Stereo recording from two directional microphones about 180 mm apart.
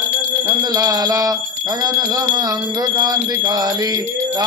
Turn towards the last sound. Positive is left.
turn(degrees=-20)  # may be behind; listen again after turning